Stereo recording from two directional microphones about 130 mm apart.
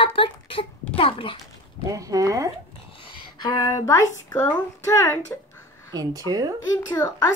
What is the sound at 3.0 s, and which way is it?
Speech, 30° left (ahead or behind).